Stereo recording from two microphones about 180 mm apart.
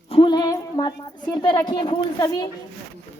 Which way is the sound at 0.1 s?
25° left (ahead or behind).